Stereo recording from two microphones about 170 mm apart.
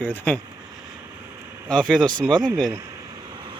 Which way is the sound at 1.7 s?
5° left (ahead or behind).